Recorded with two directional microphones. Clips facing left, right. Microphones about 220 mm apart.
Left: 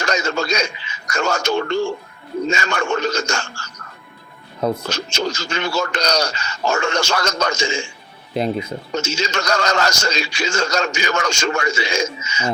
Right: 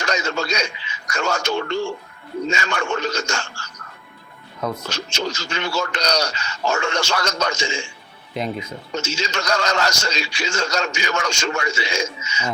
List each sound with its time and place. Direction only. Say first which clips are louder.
0.0 s a man's voice: left 2 dB; 45° left (ahead or behind)
4.9 s a man's voice: left 3 dB; 45° left (ahead or behind)
8.3 s speech: left 5 dB; 35° left (ahead or behind)
8.5 s a man's voice: left 4 dB; 45° left (ahead or behind)